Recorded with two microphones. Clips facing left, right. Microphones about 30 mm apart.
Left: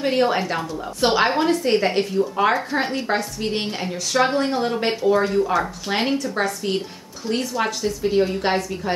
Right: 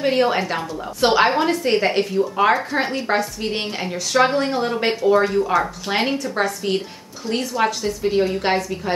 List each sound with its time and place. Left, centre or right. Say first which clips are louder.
0.0 s a woman's voice: right 1 dB; centre